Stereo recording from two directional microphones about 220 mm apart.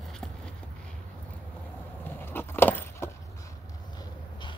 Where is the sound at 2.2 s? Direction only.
10° left (ahead or behind).